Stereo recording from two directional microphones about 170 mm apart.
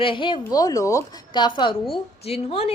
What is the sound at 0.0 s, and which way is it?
A woman's voice, 30° left (ahead or behind).